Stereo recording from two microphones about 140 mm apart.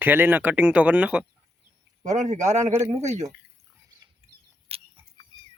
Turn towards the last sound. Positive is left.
turn(degrees=-45)  # may be behind; listen again after turning